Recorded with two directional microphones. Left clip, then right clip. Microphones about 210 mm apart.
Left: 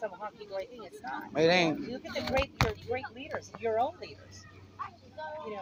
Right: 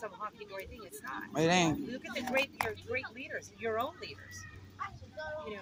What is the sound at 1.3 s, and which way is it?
Speech, 50° right (ahead or behind).